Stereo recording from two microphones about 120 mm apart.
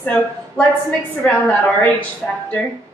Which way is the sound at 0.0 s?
10° left (ahead or behind).